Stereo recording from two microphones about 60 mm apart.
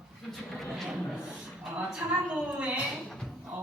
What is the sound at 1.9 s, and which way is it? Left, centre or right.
Speech, centre.